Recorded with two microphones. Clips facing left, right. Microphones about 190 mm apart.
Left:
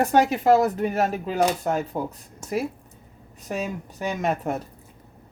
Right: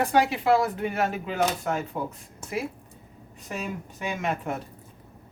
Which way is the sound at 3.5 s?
40° left (ahead or behind).